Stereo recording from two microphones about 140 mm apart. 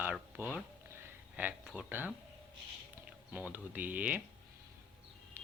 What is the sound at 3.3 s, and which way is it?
Speech, 15° right (ahead or behind).